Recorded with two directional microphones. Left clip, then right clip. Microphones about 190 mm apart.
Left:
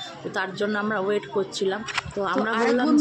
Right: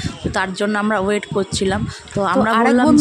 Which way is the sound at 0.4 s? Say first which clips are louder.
Right 6 dB; 55° right (ahead or behind).